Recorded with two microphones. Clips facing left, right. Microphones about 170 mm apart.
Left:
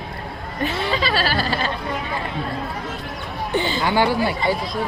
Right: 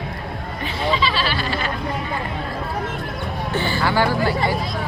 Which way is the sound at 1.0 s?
45° left (ahead or behind).